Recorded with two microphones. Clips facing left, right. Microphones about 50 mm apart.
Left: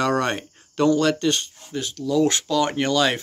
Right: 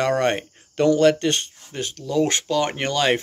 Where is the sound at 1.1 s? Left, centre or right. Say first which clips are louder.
Even; right.